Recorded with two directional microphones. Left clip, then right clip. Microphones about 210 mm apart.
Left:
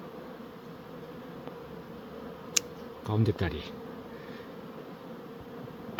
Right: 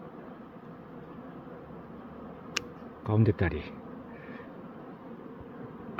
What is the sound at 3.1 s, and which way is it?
Speech, 30° right (ahead or behind).